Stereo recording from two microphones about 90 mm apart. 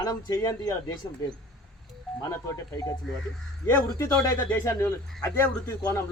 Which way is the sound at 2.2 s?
35° left (ahead or behind).